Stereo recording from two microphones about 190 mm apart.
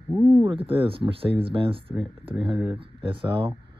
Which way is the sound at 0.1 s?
20° right (ahead or behind).